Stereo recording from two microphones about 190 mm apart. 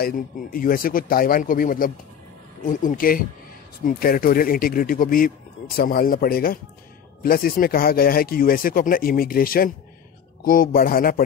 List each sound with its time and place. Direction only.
0.0 s speech: 50° left (ahead or behind)